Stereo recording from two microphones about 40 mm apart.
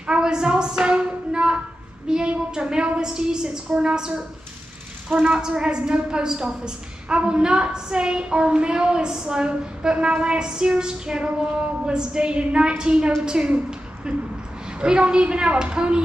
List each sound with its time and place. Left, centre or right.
0.0 s a sound: right
3.0 s a woman's voice: centre
5.2 s a woman's voice: right